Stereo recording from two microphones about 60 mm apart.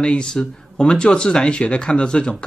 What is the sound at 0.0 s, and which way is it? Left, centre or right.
Speech, centre.